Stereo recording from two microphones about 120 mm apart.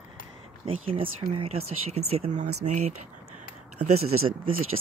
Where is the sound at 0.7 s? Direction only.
50° right (ahead or behind); by 2.9 s 70° right (ahead or behind).